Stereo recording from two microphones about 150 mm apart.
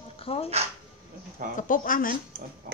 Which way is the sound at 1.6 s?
65° left (ahead or behind).